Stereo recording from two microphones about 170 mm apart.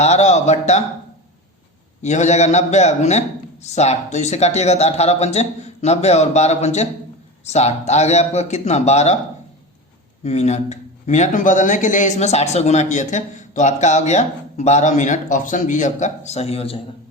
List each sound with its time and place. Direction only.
0.0 s a sound: 40° left (ahead or behind)
2.0 s a man's voice: 45° left (ahead or behind)
10.2 s speech: 40° left (ahead or behind)